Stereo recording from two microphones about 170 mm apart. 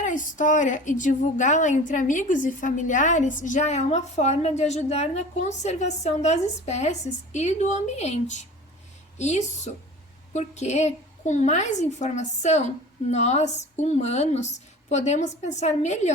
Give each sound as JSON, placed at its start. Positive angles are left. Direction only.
{"t": 0.0, "sound": "a woman's voice", "side_deg": 50}